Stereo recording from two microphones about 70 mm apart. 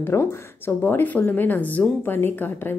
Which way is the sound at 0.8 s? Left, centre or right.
Left.